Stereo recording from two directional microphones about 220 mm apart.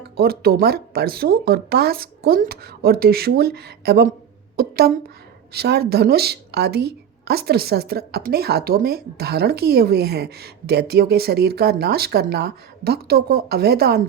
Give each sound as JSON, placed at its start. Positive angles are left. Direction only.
{"t": 0.2, "sound": "a woman's voice", "side_deg": -45}